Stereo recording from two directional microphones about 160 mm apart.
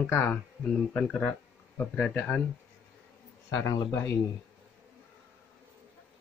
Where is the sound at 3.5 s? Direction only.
20° left (ahead or behind).